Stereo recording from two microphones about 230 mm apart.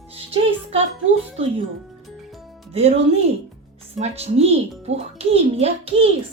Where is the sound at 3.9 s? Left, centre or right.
Right.